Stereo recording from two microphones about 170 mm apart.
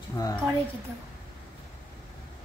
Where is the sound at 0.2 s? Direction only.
15° left (ahead or behind).